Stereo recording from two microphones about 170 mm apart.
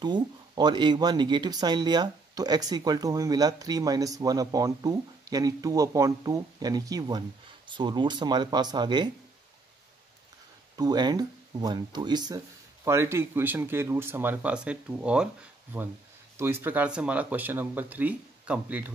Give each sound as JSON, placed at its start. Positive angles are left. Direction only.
{"t": 0.0, "sound": "speech", "side_deg": -25}
{"t": 10.8, "sound": "speech", "side_deg": -25}
{"t": 16.3, "sound": "speech", "side_deg": -15}